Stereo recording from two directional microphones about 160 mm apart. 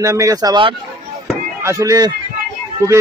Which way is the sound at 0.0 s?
20° right (ahead or behind).